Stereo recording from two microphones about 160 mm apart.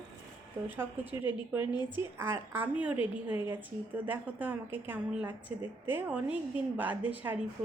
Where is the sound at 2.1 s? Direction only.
15° right (ahead or behind).